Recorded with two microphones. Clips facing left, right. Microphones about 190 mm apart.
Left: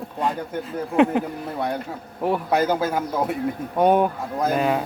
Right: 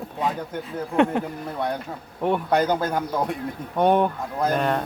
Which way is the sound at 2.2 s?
5° left (ahead or behind).